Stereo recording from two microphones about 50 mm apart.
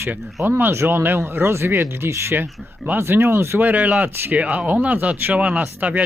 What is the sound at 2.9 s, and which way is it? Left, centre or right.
Speech, right.